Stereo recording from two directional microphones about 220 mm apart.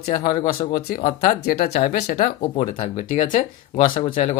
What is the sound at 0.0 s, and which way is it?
Speech, 40° left (ahead or behind).